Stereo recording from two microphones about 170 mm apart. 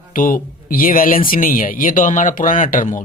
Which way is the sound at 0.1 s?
55° left (ahead or behind).